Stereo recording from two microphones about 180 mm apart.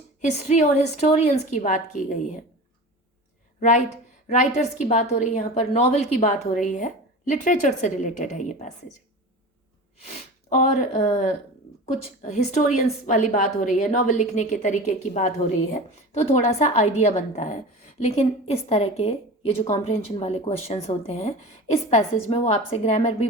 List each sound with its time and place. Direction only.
0.2 s a woman's voice: 40° left (ahead or behind)
3.6 s a woman's voice: 40° left (ahead or behind)
10.5 s a woman's voice: 40° left (ahead or behind)